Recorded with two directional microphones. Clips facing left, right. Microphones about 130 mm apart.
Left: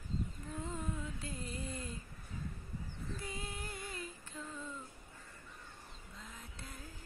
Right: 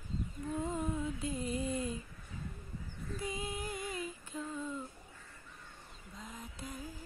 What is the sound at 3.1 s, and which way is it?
Female singing, 15° right (ahead or behind).